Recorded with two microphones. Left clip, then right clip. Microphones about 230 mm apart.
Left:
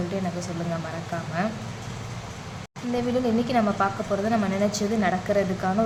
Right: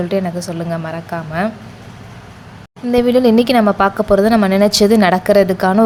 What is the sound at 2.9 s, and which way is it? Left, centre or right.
Speech, right.